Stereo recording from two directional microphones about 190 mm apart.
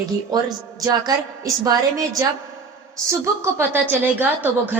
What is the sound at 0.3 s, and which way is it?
Speech, 20° right (ahead or behind).